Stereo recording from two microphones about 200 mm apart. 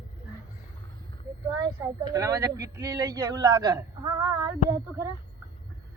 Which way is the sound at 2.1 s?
15° right (ahead or behind).